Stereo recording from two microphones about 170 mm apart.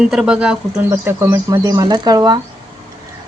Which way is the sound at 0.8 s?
15° right (ahead or behind).